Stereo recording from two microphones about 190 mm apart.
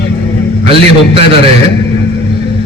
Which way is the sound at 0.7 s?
30° right (ahead or behind).